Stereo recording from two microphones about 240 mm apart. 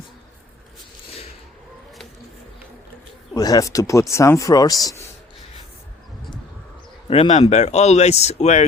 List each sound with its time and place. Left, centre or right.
3.3 s speech: centre
7.1 s speech: left